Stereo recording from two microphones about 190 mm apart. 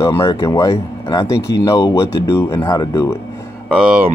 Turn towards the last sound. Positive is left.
turn(degrees=-5)  # may be behind; listen again after turning